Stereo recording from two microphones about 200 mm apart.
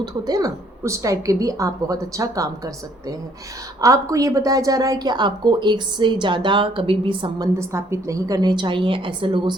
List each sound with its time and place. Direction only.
0.0 s a woman's voice: 20° right (ahead or behind)
3.8 s a woman's voice: 15° right (ahead or behind)